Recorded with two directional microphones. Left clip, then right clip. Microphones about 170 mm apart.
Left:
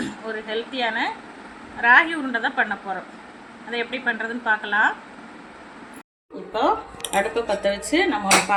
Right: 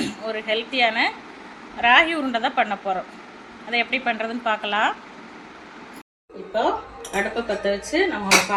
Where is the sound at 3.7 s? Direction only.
35° right (ahead or behind).